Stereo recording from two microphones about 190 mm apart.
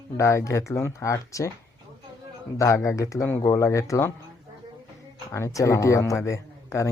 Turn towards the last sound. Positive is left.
turn(degrees=15)  # may be behind; listen again after turning